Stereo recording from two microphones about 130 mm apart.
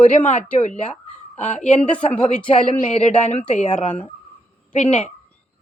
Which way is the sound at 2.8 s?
60° left (ahead or behind).